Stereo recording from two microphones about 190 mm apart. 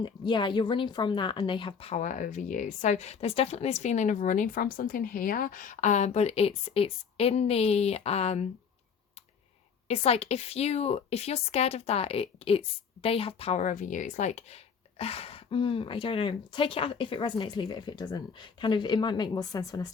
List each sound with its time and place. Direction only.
0.0 s speech: 25° left (ahead or behind)
9.9 s speech: 30° left (ahead or behind)